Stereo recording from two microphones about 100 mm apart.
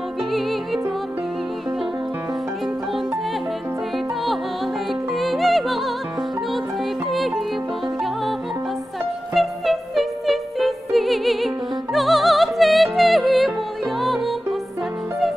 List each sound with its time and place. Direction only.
5.1 s music: centre (ahead or behind)
7.1 s music: centre (ahead or behind)
9.3 s music: centre (ahead or behind)